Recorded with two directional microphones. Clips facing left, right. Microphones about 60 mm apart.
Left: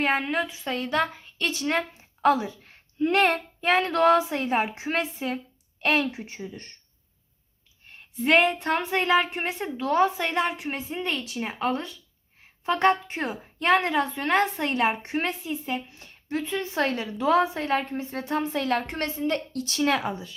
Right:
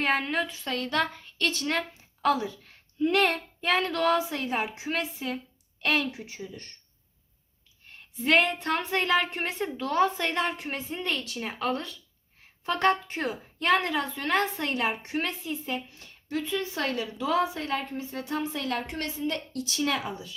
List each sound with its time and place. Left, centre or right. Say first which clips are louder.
0.0 s a woman's voice: left 2 dB; centre
2.2 s a woman's voice: left 4 dB; left
7.9 s a woman's voice: left 3 dB; centre
15.4 s a woman's voice: left 2 dB; centre
15.9 s a woman's voice: left 3 dB; left
19.5 s speech: left 4 dB; left